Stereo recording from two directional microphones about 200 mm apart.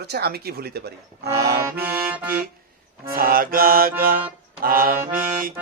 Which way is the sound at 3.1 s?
45° right (ahead or behind).